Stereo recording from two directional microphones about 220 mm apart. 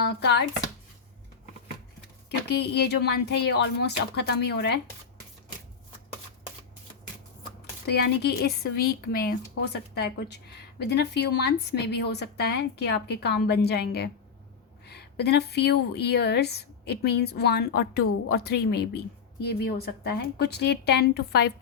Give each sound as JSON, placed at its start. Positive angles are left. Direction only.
{"t": 0.0, "sound": "speech", "side_deg": 50}
{"t": 2.5, "sound": "speech", "side_deg": 50}
{"t": 7.9, "sound": "speech", "side_deg": 50}